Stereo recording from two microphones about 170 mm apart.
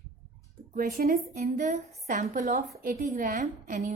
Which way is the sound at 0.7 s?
55° right (ahead or behind).